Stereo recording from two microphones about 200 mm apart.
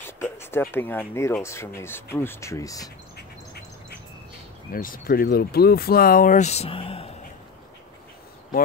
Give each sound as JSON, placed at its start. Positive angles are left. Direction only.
{"t": 0.0, "sound": "speech", "side_deg": 10}
{"t": 4.7, "sound": "speech", "side_deg": 45}